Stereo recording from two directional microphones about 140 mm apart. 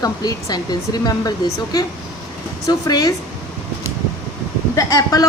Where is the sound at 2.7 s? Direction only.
25° left (ahead or behind).